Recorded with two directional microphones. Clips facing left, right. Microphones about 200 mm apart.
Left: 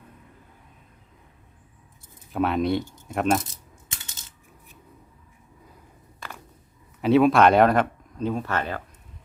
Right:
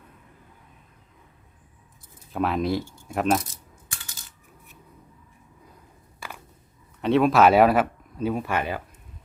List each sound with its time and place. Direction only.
2.4 s speech: centre (ahead or behind)
3.8 s typing: 20° left (ahead or behind)
6.2 s a sound: 10° right (ahead or behind)
7.0 s speech: centre (ahead or behind)